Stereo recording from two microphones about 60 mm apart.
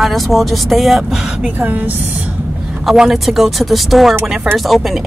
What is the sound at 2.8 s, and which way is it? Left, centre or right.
Speech, centre.